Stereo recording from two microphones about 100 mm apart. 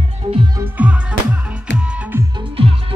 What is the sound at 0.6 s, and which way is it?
Music, 15° right (ahead or behind).